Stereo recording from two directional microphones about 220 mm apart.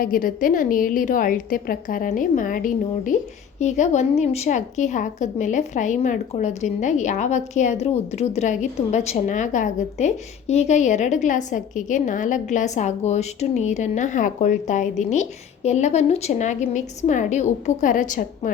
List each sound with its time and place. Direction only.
0.0 s a woman's voice: 40° left (ahead or behind)